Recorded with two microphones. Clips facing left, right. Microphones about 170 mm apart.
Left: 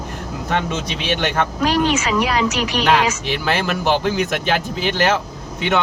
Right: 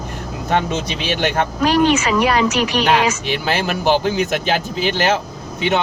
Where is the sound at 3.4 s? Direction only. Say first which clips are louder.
Right 1 dB; 30° right (ahead or behind).